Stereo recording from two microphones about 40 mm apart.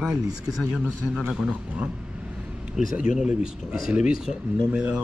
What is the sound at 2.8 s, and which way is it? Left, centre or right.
Speech, right.